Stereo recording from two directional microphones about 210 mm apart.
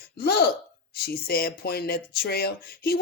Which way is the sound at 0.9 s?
50° left (ahead or behind).